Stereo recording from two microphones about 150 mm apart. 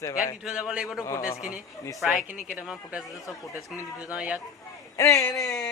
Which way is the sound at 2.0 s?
10° right (ahead or behind).